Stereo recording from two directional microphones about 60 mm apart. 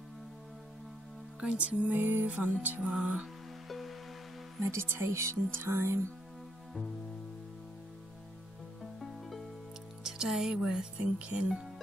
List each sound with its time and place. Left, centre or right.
1.4 s music: right
3.6 s music: centre
4.6 s speech: right
10.0 s speech: centre